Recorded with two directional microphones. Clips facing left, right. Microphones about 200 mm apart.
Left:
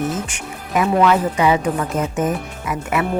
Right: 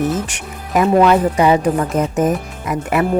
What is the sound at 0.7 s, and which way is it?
Speech, 35° right (ahead or behind).